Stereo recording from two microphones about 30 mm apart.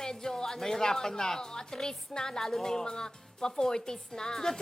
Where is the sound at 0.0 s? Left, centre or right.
Left.